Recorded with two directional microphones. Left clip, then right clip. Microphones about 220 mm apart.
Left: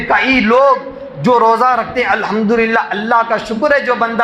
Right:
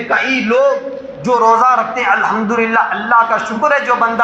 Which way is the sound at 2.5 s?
65° left (ahead or behind).